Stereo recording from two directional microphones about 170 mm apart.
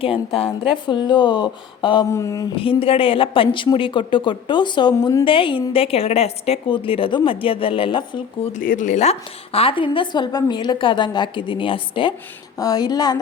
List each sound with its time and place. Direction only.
0.0 s a woman's voice: 35° left (ahead or behind)
2.6 s a woman's voice: 30° left (ahead or behind)
8.5 s a woman's voice: 50° left (ahead or behind); by 13.1 s 25° left (ahead or behind)